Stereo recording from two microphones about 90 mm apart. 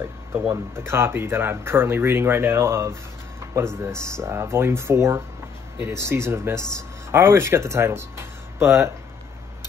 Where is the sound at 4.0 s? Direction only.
30° right (ahead or behind).